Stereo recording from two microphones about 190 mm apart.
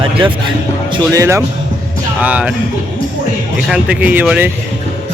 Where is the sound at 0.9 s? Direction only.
20° right (ahead or behind).